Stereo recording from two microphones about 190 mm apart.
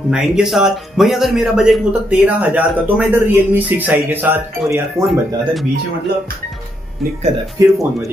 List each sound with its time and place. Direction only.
0.1 s a man's voice: centre (ahead or behind)
5.0 s speech: centre (ahead or behind)
7.6 s a man's voice: 15° right (ahead or behind)